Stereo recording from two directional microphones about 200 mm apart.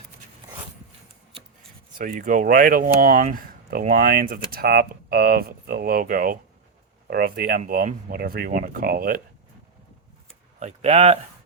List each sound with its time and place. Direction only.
2.0 s speech: 40° right (ahead or behind)
10.6 s speech: 35° right (ahead or behind)